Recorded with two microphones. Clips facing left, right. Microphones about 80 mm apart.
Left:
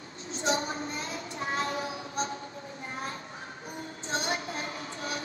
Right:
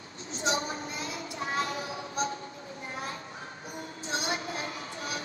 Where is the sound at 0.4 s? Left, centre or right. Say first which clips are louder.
Left 1 dB; left.